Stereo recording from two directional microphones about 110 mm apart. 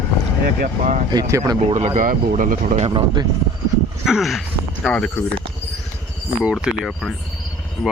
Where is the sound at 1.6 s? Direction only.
75° right (ahead or behind).